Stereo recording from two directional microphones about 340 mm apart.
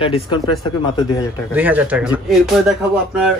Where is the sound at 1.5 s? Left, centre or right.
Centre.